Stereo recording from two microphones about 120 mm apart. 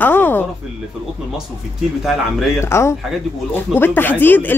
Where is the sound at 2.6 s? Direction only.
25° left (ahead or behind).